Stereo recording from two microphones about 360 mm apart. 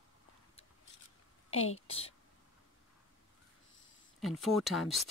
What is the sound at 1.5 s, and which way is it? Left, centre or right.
Speech, left.